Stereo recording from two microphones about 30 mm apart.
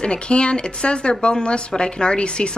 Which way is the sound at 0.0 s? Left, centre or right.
Left.